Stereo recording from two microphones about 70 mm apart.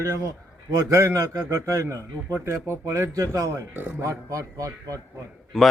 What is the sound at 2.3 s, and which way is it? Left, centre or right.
A man's voice, right.